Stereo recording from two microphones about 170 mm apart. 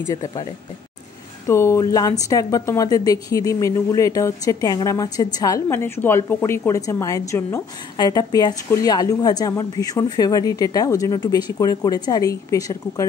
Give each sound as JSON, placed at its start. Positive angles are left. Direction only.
{"t": 0.1, "sound": "a woman's voice", "side_deg": 20}
{"t": 1.5, "sound": "a woman's voice", "side_deg": 15}